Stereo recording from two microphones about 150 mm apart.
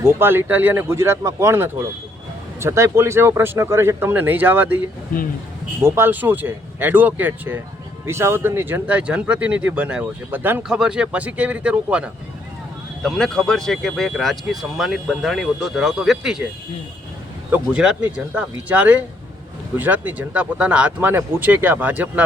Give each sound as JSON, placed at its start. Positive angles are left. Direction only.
{"t": 0.0, "sound": "speech", "side_deg": -15}
{"t": 5.8, "sound": "speech", "side_deg": -15}
{"t": 13.0, "sound": "speech", "side_deg": 0}
{"t": 17.5, "sound": "speech", "side_deg": -5}